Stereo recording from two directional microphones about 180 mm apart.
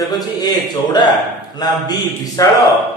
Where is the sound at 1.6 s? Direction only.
20° left (ahead or behind).